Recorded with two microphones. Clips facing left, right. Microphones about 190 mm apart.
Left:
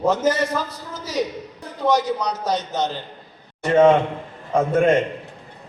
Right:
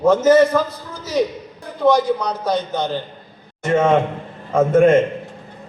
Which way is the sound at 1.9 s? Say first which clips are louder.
Right 3 dB; 40° left (ahead or behind).